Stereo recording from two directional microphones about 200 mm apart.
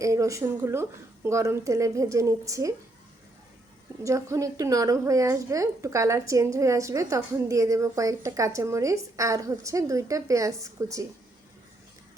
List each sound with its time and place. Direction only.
0.0 s a woman's voice: 15° right (ahead or behind)
4.0 s a woman's voice: 15° right (ahead or behind)